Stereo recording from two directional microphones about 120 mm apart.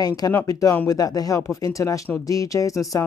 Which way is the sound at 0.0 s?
30° left (ahead or behind).